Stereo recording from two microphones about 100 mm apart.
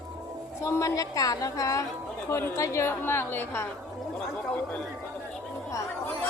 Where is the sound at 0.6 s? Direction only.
30° left (ahead or behind).